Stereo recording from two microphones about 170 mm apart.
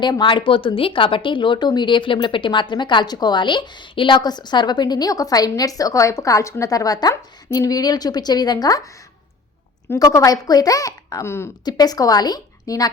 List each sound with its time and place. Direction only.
0.0 s a woman's voice: 25° left (ahead or behind)
9.9 s a woman's voice: 20° left (ahead or behind)